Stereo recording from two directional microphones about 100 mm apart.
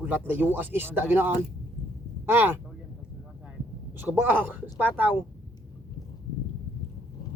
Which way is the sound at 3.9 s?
20° right (ahead or behind).